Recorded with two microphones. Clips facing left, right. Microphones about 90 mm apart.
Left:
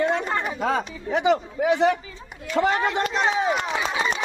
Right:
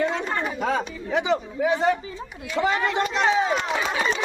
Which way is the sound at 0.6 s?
45° left (ahead or behind).